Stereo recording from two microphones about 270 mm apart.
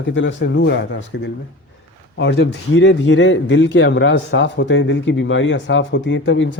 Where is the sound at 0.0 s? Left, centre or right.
Left.